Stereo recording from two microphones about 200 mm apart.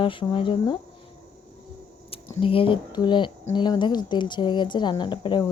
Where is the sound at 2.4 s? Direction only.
25° left (ahead or behind).